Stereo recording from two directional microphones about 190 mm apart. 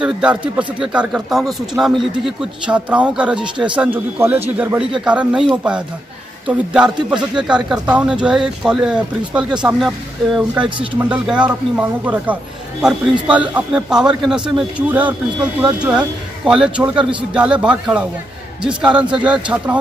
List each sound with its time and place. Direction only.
0.0 s speech: 5° right (ahead or behind)
3.3 s speech: 25° right (ahead or behind)
3.7 s speech: 10° right (ahead or behind)